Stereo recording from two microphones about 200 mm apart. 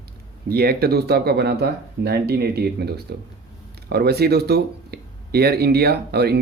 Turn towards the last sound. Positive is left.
turn(degrees=-55)  # may be behind; listen again after turning